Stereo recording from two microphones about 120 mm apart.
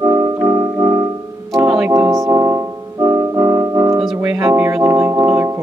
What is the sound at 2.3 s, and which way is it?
Music, 25° right (ahead or behind).